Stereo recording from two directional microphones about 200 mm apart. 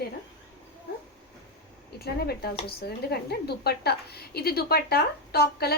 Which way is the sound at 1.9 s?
50° left (ahead or behind).